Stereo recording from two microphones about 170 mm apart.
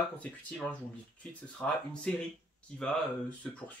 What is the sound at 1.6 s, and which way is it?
Speech, 5° left (ahead or behind).